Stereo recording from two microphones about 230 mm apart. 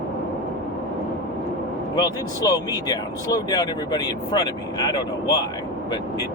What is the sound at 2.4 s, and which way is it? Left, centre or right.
Speech, centre.